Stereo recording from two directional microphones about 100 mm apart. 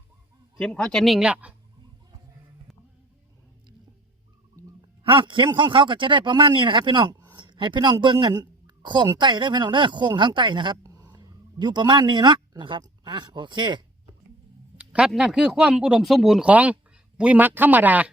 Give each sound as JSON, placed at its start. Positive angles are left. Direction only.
{"t": 0.6, "sound": "speech", "side_deg": 5}
{"t": 5.0, "sound": "a man's voice", "side_deg": -55}
{"t": 7.3, "sound": "a sound", "side_deg": -50}
{"t": 8.0, "sound": "a woman's voice", "side_deg": -50}
{"t": 10.8, "sound": "a sound", "side_deg": -35}
{"t": 12.8, "sound": "speech", "side_deg": -45}
{"t": 14.9, "sound": "speech", "side_deg": -5}